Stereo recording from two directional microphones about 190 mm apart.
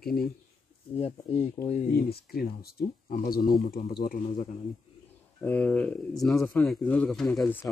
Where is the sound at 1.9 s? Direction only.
55° left (ahead or behind).